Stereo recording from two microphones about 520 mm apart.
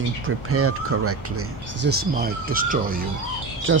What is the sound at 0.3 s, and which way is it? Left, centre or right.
Speech, right.